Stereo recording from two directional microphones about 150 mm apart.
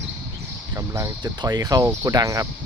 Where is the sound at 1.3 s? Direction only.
30° right (ahead or behind).